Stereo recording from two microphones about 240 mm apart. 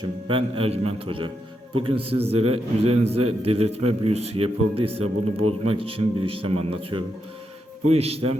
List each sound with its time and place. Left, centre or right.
0.0 s a man's voice: right